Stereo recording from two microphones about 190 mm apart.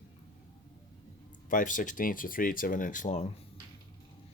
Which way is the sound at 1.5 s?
45° left (ahead or behind).